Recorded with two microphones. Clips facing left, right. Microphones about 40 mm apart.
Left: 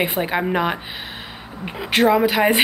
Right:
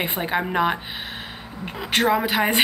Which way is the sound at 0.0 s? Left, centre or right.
Centre.